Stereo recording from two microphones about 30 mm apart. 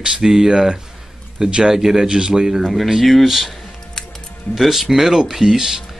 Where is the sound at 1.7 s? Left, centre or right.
Centre.